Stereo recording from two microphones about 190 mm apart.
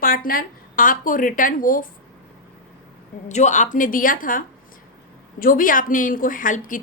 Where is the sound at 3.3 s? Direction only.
40° left (ahead or behind).